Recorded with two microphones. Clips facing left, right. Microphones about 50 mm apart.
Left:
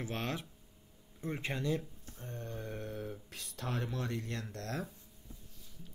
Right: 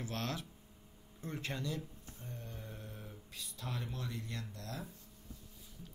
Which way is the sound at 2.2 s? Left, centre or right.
Left.